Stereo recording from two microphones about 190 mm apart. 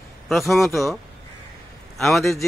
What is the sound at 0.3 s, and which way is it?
Speech, centre (ahead or behind).